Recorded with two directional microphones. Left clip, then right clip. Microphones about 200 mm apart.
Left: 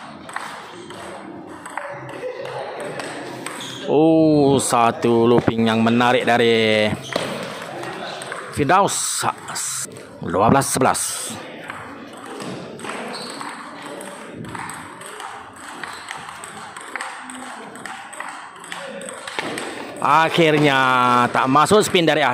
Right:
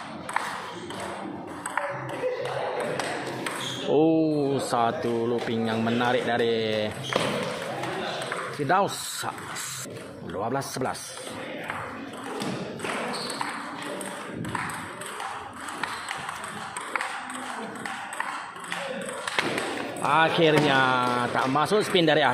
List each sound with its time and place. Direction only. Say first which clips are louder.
3.9 s speech: left 8 dB; 20° left (ahead or behind)
8.6 s speech: left 8 dB; 25° left (ahead or behind)
20.0 s speech: left 6 dB; 25° left (ahead or behind)